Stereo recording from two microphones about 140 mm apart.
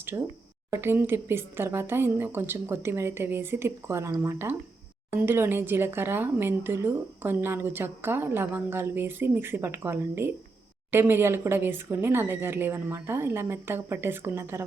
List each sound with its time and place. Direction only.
0.1 s speech: 20° right (ahead or behind)